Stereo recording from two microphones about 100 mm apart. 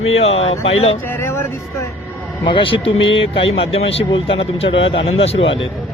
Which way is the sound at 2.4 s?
60° left (ahead or behind).